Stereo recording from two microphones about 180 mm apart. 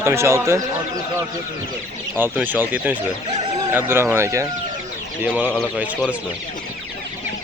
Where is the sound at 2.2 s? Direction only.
10° right (ahead or behind).